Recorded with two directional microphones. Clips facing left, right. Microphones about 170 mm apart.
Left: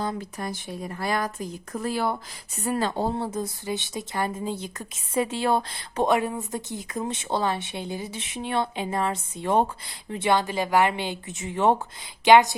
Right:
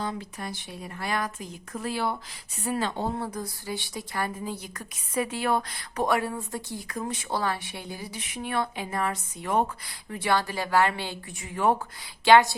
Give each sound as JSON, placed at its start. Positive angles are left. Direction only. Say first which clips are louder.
{"t": 0.0, "sound": "speech", "louder": "left 3 dB", "side_deg": 40}
{"t": 3.2, "sound": "speech", "louder": "left 4 dB", "side_deg": 25}